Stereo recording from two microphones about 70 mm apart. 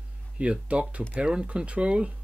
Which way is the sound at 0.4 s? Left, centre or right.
Centre.